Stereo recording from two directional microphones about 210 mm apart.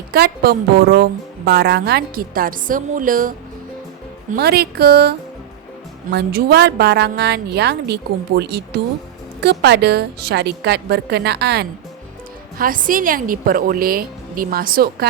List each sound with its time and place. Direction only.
0.1 s a woman's voice: 45° right (ahead or behind)